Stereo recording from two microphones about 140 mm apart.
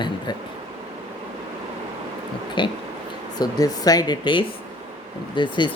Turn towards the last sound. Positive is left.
turn(degrees=35)  # may be behind; listen again after turning